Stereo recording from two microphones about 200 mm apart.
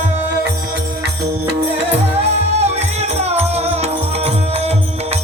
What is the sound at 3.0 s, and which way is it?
Music, 30° right (ahead or behind).